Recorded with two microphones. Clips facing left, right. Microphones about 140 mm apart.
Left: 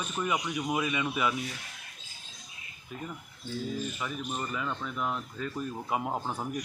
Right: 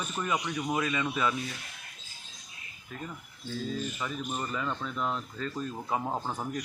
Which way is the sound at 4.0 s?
Centre (ahead or behind).